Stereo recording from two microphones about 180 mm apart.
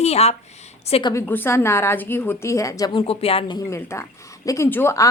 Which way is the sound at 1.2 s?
10° left (ahead or behind).